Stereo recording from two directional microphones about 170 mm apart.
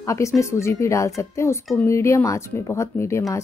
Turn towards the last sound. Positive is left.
turn(degrees=15)  # may be behind; listen again after turning